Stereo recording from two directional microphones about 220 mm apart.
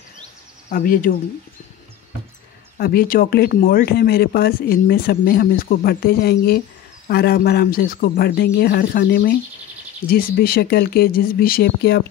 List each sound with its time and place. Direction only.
0.7 s speech: 40° left (ahead or behind)
2.8 s speech: 45° left (ahead or behind)